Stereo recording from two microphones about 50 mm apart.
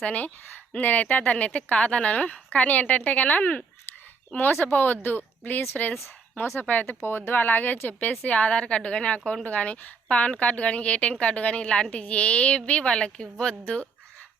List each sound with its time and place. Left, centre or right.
0.0 s a woman's voice: left
4.6 s speech: left
6.8 s a woman's voice: left; by 13.6 s centre